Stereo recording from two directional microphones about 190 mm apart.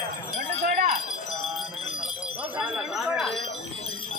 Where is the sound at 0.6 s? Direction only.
45° right (ahead or behind).